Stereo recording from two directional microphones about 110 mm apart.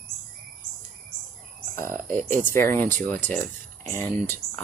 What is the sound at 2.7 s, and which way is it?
Speech, 15° left (ahead or behind).